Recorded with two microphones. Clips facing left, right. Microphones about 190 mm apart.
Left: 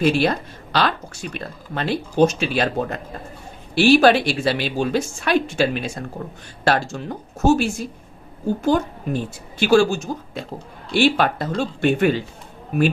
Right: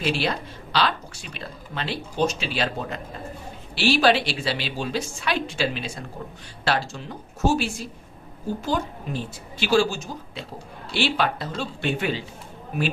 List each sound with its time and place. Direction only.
0.0 s speech: 50° left (ahead or behind)